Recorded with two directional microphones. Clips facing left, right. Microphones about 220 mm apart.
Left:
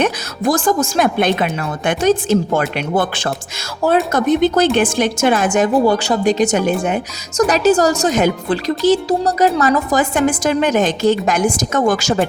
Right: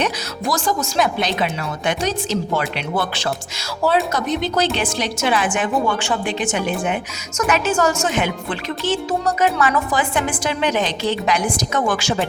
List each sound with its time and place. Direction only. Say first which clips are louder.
0.0 s speech: left 6 dB; 50° left (ahead or behind)